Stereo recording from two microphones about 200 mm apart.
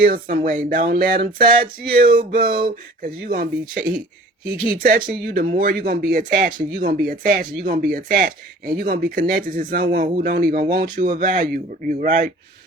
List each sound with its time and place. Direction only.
0.0 s speech: 45° right (ahead or behind)